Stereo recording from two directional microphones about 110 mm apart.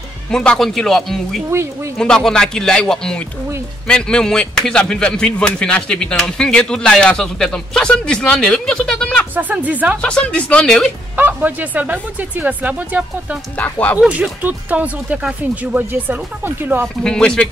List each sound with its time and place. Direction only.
0.3 s a man's voice: 5° left (ahead or behind)
1.5 s speech: 25° right (ahead or behind)
2.0 s a man's voice: 5° left (ahead or behind)
9.3 s speech: 15° right (ahead or behind)
10.0 s a man's voice: 10° left (ahead or behind)
11.1 s speech: 15° right (ahead or behind)
13.6 s a man's voice: 15° left (ahead or behind)
14.0 s speech: 10° right (ahead or behind)
17.0 s a man's voice: 5° left (ahead or behind)